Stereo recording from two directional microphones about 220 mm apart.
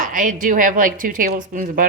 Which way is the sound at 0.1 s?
35° right (ahead or behind).